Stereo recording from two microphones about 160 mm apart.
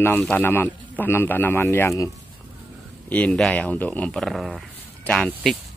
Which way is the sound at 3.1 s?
10° left (ahead or behind).